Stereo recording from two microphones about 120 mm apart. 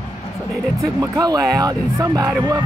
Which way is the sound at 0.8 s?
30° right (ahead or behind).